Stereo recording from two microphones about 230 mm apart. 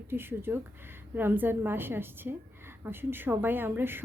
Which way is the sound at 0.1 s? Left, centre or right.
Centre.